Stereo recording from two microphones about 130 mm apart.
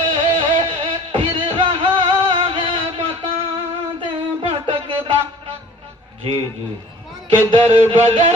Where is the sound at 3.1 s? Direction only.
50° right (ahead or behind).